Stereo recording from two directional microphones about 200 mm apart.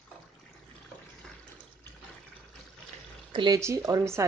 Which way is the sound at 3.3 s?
20° right (ahead or behind).